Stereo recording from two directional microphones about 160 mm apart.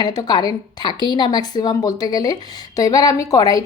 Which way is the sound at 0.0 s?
25° left (ahead or behind).